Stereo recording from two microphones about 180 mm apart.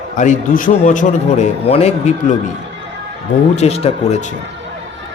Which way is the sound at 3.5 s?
35° left (ahead or behind).